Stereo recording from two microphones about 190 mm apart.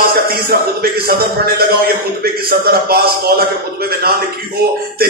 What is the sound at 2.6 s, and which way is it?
Speech, 55° right (ahead or behind).